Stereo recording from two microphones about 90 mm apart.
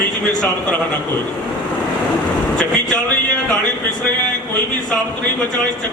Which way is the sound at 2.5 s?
10° left (ahead or behind).